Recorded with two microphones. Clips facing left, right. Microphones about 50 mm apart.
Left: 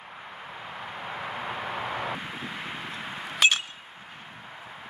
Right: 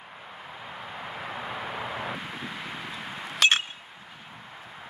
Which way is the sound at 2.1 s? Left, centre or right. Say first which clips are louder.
Left 1 dB; centre.